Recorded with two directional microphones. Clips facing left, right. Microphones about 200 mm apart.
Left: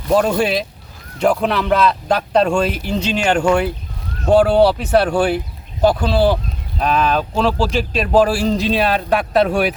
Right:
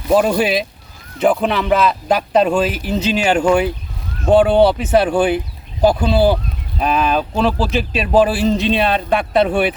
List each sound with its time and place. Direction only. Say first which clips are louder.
0.1 s speech: right 1 dB; 5° right (ahead or behind)